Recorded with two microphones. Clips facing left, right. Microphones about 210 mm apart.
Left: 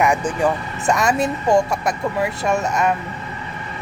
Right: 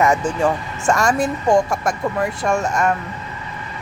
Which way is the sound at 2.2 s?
5° left (ahead or behind).